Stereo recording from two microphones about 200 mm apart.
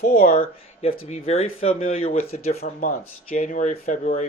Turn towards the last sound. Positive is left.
turn(degrees=35)  # may be behind; listen again after turning